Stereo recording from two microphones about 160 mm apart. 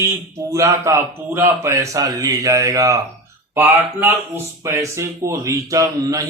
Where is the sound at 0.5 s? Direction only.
20° right (ahead or behind).